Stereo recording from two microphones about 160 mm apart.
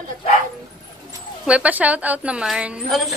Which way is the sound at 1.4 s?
10° right (ahead or behind).